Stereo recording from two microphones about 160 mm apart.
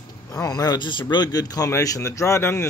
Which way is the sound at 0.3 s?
20° left (ahead or behind).